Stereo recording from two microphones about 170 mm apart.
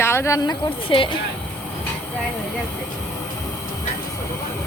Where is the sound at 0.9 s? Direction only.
30° left (ahead or behind).